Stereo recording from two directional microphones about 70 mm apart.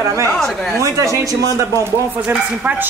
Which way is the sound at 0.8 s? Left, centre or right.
Right.